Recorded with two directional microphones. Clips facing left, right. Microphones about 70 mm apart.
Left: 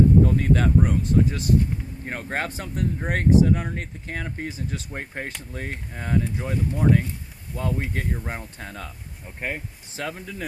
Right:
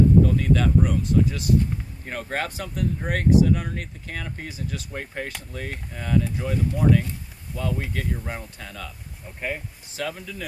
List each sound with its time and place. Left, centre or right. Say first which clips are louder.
0.3 s speech: even; left